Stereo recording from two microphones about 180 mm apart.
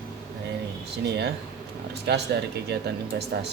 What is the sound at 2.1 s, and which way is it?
Mantra, 65° right (ahead or behind).